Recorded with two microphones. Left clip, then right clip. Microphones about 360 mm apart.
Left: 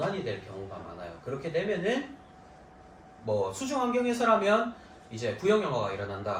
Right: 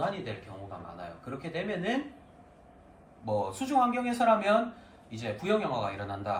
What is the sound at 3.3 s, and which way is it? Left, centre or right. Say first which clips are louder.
Speech: even; centre.